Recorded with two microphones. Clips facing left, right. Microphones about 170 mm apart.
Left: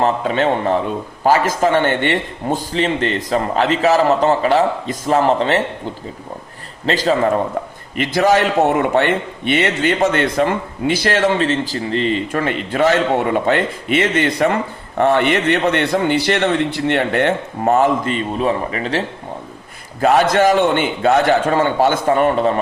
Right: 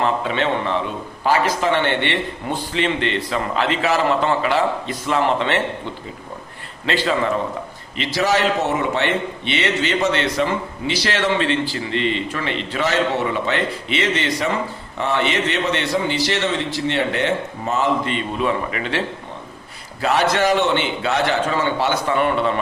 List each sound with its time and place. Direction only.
0.0 s a man's voice: 40° left (ahead or behind)
6.8 s a man's voice: 40° left (ahead or behind)
20.0 s a man's voice: 50° left (ahead or behind)